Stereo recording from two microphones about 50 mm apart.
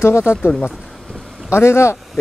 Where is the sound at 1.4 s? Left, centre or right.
Left.